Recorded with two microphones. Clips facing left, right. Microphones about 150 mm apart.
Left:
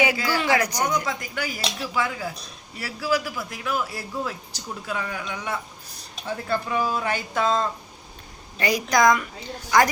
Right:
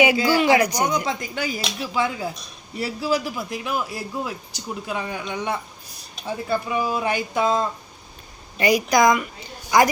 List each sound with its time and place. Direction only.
0.0 s speech: 15° right (ahead or behind)
1.0 s a man's voice: 20° right (ahead or behind)
6.2 s a woman's voice: 10° right (ahead or behind)